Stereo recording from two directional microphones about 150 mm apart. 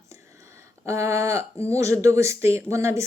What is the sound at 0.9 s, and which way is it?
Speech, 20° right (ahead or behind).